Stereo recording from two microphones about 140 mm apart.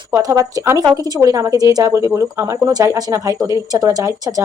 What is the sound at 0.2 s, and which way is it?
A woman's voice, 25° right (ahead or behind).